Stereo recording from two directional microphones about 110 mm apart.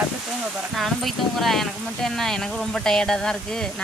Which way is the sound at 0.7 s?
Centre (ahead or behind).